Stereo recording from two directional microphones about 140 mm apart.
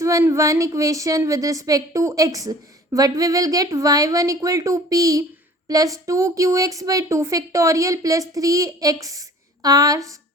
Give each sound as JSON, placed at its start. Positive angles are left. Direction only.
{"t": 0.0, "sound": "a woman's voice", "side_deg": -20}